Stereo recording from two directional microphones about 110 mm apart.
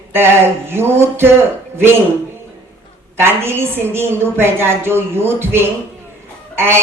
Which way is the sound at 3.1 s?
20° right (ahead or behind).